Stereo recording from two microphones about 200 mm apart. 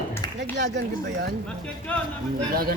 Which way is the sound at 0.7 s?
60° right (ahead or behind).